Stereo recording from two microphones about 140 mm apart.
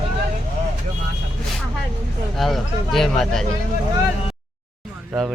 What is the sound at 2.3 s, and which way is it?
Speech, centre (ahead or behind).